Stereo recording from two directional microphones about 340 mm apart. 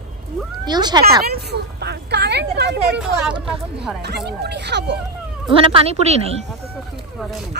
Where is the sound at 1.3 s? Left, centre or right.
Right.